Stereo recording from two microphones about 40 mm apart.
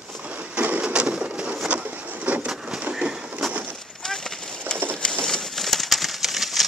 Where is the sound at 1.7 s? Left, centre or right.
Right.